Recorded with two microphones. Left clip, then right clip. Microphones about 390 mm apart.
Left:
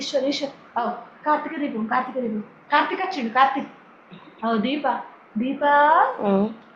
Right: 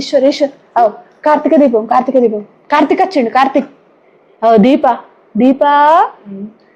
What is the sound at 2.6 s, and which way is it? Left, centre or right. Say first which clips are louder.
A woman's voice: right 10 dB; right.